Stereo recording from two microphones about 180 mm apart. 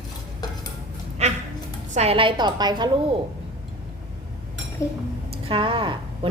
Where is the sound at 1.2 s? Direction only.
35° right (ahead or behind).